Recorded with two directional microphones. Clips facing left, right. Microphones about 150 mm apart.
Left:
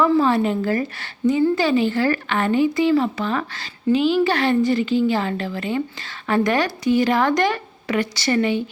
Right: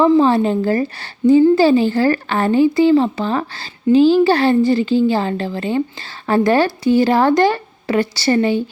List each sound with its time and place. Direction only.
0.2 s a woman's voice: 30° right (ahead or behind)